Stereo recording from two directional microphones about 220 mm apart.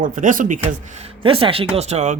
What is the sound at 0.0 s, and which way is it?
Speech, 35° right (ahead or behind).